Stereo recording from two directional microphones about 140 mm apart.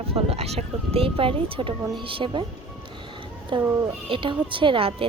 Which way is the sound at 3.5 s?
35° right (ahead or behind).